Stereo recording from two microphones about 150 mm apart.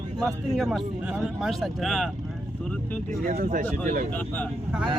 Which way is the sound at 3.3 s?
70° right (ahead or behind).